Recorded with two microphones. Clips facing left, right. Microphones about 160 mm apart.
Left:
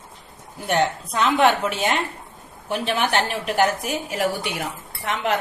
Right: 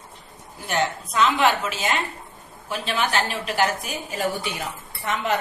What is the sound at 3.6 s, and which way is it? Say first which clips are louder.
Speech: left 3 dB; 80° left.